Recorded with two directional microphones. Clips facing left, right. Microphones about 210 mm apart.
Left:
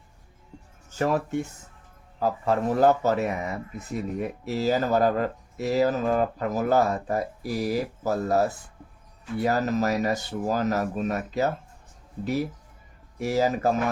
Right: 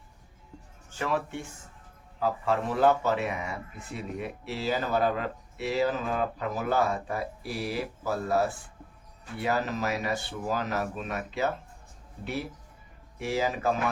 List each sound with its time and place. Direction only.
0.9 s speech: 40° left (ahead or behind)
13.1 s speech: 40° left (ahead or behind)